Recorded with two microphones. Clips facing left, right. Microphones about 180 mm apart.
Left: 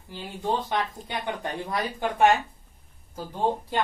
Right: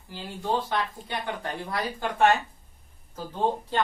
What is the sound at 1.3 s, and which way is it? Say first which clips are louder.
Speech: left 4 dB; 20° left (ahead or behind).